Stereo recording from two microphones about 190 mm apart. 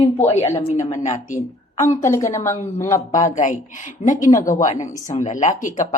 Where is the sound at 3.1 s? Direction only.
40° left (ahead or behind).